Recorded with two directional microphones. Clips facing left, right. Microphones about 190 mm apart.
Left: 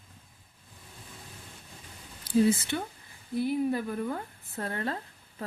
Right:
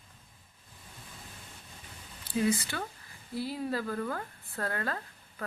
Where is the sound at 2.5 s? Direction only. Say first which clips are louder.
Left 4 dB; 25° left (ahead or behind).